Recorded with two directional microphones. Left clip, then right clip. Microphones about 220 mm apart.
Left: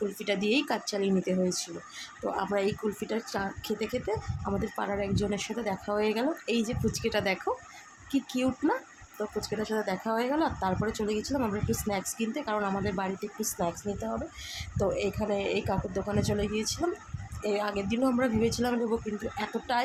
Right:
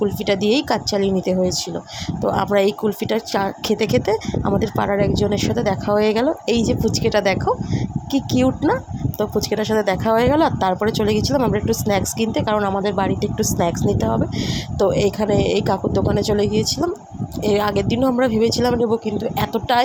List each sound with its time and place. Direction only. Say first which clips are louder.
0.3 s speech: right 9 dB; 25° right (ahead or behind)